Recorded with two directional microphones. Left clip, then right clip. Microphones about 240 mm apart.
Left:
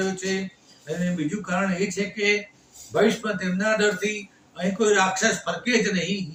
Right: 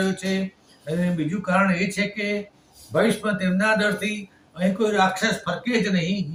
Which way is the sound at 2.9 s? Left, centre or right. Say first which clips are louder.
Even; centre.